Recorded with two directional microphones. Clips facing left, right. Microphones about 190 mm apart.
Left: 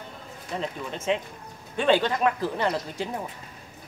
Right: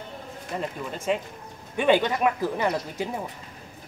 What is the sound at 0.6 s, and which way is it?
Speech, 5° right (ahead or behind).